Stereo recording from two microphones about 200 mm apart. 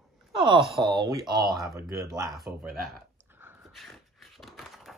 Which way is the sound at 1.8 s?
15° right (ahead or behind).